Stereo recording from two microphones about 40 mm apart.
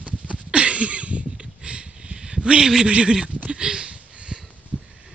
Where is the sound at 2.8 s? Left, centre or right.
Right.